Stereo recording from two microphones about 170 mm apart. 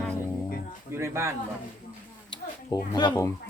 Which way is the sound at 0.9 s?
15° right (ahead or behind).